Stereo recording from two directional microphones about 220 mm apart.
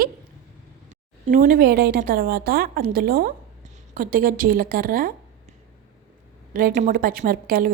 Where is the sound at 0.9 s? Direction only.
35° right (ahead or behind).